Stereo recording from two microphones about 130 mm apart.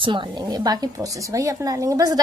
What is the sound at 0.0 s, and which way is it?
A woman's voice, 40° right (ahead or behind).